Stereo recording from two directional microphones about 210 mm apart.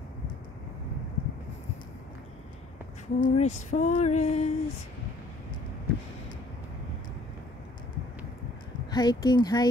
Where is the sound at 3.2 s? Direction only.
30° left (ahead or behind).